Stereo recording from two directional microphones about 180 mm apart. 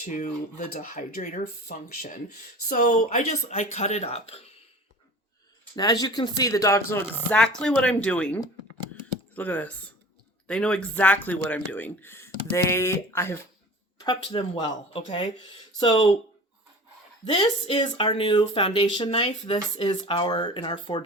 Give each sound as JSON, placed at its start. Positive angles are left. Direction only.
{"t": 0.0, "sound": "speech", "side_deg": 45}
{"t": 5.7, "sound": "speech", "side_deg": 20}
{"t": 17.3, "sound": "speech", "side_deg": 25}